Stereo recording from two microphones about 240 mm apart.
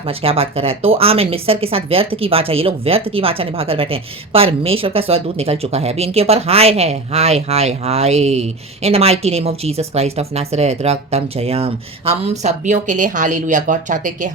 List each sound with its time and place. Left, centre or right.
0.1 s speech: right